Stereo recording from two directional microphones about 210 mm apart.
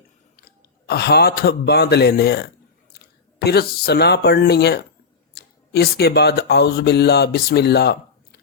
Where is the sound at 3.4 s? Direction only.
50° left (ahead or behind).